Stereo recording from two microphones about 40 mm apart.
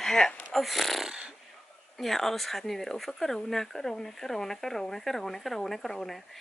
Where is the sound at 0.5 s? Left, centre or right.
Centre.